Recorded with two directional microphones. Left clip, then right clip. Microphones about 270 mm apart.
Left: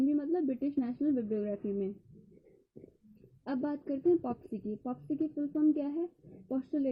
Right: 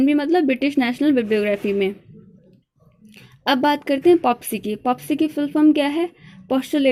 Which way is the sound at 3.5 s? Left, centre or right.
Right.